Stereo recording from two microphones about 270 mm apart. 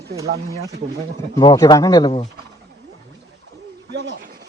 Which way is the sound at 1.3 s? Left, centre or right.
Centre.